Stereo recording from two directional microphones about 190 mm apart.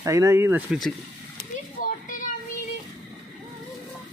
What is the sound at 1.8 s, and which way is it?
Children playing, 45° left (ahead or behind).